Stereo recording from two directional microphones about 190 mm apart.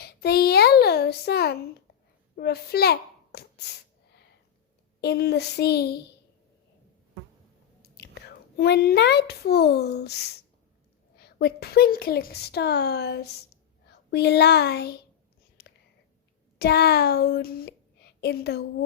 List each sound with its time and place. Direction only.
0.0 s a sound: 55° left (ahead or behind)
2.3 s a child's voice: 55° left (ahead or behind)
4.9 s speech: 60° left (ahead or behind)
7.8 s speech: 60° left (ahead or behind)
15.6 s whispering: 60° left (ahead or behind)
16.6 s speech: 55° left (ahead or behind)